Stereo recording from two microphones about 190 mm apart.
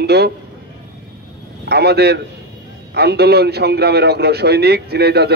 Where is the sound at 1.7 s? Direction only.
60° right (ahead or behind).